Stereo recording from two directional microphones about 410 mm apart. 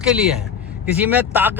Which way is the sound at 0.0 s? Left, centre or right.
Centre.